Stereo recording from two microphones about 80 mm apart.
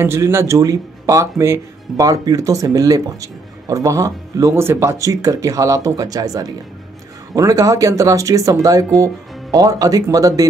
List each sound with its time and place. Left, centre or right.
0.0 s speech: right